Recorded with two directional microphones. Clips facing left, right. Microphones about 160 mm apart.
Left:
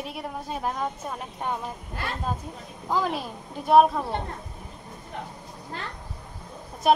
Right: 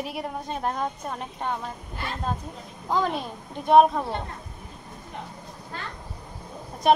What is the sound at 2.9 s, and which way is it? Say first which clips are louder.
A woman's voice: right 1 dB; 5° left (ahead or behind).